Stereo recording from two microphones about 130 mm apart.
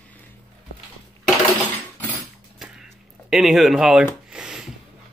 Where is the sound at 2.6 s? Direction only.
5° right (ahead or behind).